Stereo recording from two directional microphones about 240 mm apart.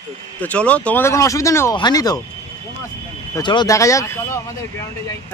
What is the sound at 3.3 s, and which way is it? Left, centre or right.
Speech, centre.